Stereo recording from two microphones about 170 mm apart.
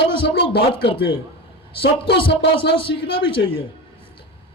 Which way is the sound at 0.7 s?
30° left (ahead or behind).